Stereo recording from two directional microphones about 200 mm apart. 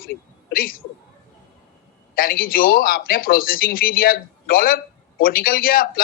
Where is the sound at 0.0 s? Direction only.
45° left (ahead or behind).